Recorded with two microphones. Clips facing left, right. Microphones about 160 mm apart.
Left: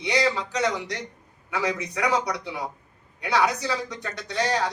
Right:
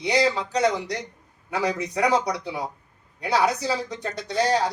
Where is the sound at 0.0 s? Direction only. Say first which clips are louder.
Right 2 dB; 35° right (ahead or behind).